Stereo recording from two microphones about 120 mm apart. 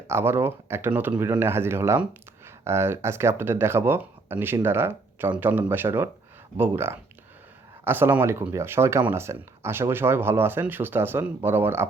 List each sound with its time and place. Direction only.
0.1 s speech: 20° right (ahead or behind)